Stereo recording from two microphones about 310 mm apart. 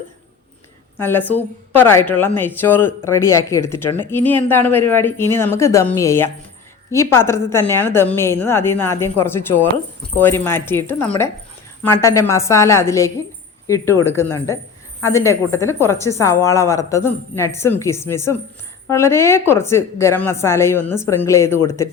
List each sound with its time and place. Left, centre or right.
0.9 s speech: centre